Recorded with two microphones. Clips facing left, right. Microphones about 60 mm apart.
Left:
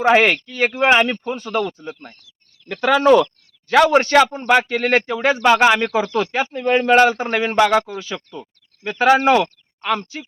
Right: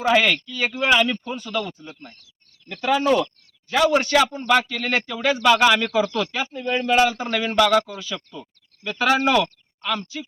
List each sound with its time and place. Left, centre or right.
0.0 s a man's voice: left
2.8 s speech: left
3.9 s a man's voice: left
6.5 s a man's voice: left